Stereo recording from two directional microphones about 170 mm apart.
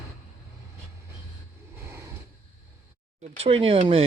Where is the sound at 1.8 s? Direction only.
15° right (ahead or behind).